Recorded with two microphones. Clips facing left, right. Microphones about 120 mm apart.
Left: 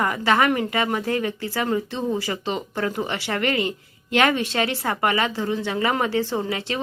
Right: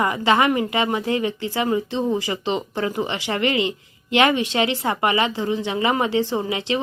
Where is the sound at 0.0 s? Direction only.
15° right (ahead or behind).